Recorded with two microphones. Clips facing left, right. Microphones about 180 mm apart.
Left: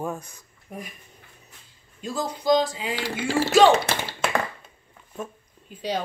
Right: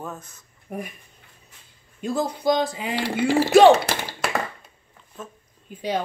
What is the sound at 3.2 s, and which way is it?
Speech, 15° right (ahead or behind).